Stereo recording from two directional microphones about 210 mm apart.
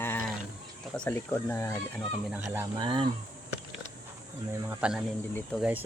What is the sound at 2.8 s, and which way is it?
Speech, 25° right (ahead or behind).